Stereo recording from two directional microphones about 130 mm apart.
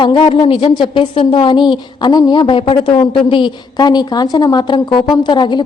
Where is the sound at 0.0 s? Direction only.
40° left (ahead or behind).